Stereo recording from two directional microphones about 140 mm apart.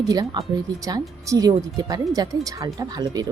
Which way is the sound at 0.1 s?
30° right (ahead or behind).